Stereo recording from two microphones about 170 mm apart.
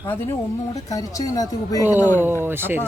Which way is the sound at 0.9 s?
20° left (ahead or behind).